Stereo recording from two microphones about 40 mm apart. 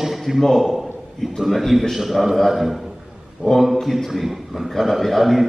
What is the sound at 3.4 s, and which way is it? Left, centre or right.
Speech, centre.